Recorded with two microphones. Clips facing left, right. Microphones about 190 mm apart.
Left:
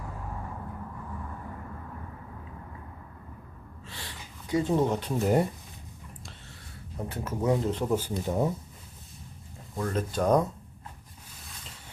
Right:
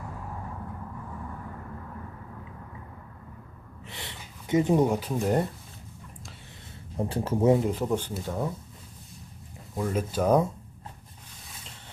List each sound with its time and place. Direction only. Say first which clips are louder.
3.8 s a sound: right 2 dB; 20° right (ahead or behind)
4.9 s speech: left 1 dB; centre (ahead or behind)
6.9 s speech: right 6 dB; 30° right (ahead or behind)
7.6 s speech: right 1 dB; 5° right (ahead or behind)
7.9 s speech: even; 5° left (ahead or behind)
8.2 s speech: left 4 dB; 20° left (ahead or behind)
9.7 s speech: right 1 dB; 10° right (ahead or behind)